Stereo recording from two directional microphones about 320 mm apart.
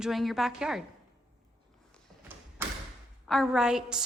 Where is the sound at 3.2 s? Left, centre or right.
Centre.